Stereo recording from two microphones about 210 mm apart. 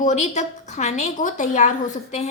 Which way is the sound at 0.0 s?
35° left (ahead or behind).